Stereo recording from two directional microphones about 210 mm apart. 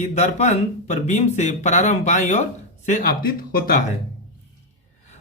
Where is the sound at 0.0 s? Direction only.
35° left (ahead or behind).